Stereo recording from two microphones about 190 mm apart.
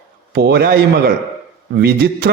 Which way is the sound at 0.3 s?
60° right (ahead or behind).